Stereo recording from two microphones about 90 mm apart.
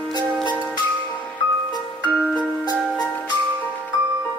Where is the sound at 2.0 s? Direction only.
15° right (ahead or behind).